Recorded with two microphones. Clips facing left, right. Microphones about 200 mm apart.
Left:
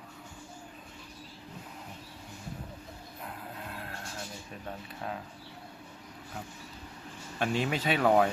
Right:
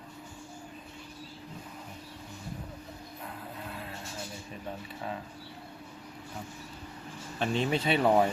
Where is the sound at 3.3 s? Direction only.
Centre (ahead or behind).